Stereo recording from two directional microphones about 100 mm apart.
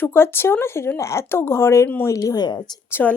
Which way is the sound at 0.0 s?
25° left (ahead or behind).